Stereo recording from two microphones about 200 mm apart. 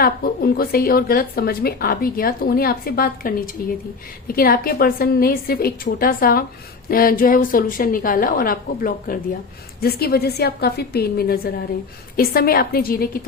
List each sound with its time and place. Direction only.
0.0 s speech: 50° left (ahead or behind)